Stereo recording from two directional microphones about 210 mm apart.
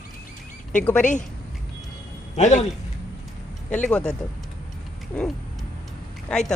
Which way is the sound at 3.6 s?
5° left (ahead or behind).